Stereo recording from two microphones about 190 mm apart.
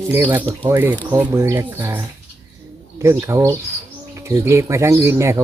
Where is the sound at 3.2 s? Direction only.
15° right (ahead or behind).